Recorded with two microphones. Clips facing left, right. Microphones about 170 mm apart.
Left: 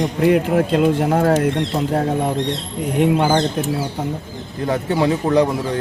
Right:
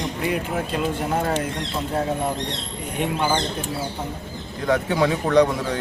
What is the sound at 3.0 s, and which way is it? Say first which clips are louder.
Speech: left 7 dB; 80° left.